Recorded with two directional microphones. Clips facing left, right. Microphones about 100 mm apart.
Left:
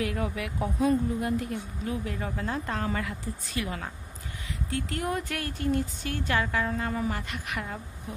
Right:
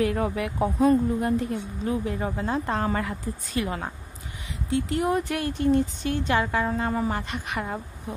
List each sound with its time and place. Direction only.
0.0 s speech: 35° right (ahead or behind)